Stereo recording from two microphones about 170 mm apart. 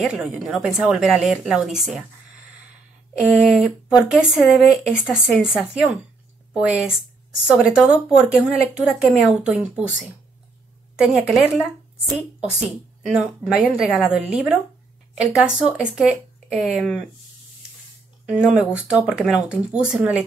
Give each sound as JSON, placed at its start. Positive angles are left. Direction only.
{"t": 0.0, "sound": "speech", "side_deg": -5}
{"t": 3.2, "sound": "speech", "side_deg": -5}
{"t": 13.0, "sound": "speech", "side_deg": -5}
{"t": 18.3, "sound": "speech", "side_deg": -5}